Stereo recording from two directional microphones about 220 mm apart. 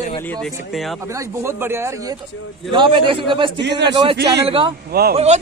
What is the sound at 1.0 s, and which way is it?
A man's voice, 15° right (ahead or behind).